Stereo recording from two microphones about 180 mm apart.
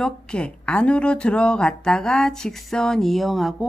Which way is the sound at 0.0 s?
5° left (ahead or behind).